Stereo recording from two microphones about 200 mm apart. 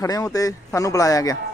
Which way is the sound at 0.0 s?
15° left (ahead or behind).